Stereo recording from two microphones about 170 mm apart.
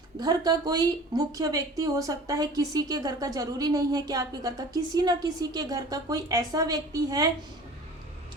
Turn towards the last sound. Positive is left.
turn(degrees=-20)  # may be behind; listen again after turning